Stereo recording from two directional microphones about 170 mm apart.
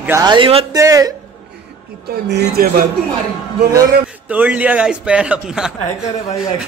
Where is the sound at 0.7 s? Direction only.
20° right (ahead or behind).